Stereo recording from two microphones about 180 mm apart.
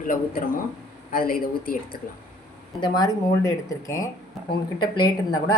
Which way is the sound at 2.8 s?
20° left (ahead or behind).